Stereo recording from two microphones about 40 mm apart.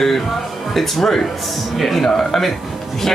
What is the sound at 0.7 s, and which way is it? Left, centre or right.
Speech, centre.